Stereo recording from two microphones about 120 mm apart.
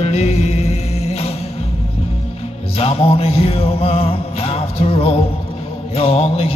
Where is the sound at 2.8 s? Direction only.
55° left (ahead or behind).